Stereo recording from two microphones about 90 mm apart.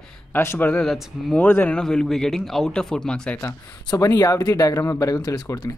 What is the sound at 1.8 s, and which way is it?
Speech, 10° left (ahead or behind).